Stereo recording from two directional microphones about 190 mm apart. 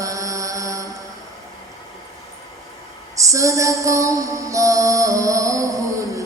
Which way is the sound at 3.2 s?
15° right (ahead or behind).